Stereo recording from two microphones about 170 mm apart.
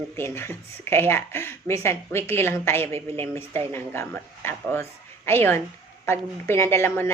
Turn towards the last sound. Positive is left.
turn(degrees=15)  # may be behind; listen again after turning